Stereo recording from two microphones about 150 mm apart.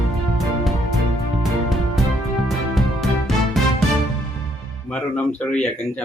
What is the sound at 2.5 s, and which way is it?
Music, centre (ahead or behind).